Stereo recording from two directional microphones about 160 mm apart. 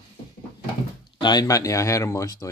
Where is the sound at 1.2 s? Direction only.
25° left (ahead or behind).